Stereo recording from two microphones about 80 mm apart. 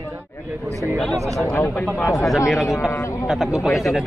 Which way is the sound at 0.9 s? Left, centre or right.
Centre.